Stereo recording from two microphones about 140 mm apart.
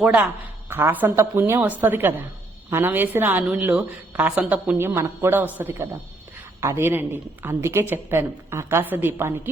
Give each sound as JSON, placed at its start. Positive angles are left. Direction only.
{"t": 0.0, "sound": "a woman's voice", "side_deg": -5}